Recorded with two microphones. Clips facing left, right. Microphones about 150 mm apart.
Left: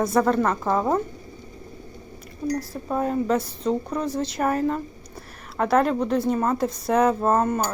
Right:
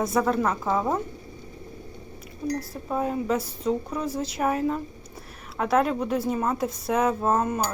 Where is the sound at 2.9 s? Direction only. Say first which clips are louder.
Left 3 dB; 5° right (ahead or behind).